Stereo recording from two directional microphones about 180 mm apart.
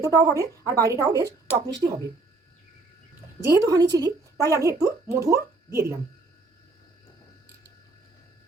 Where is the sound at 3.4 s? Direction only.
15° right (ahead or behind).